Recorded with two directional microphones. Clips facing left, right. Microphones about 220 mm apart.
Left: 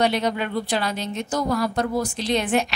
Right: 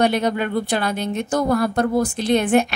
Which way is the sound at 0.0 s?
50° right (ahead or behind).